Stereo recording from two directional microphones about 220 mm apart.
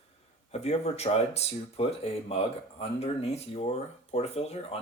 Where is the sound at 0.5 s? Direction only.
30° left (ahead or behind).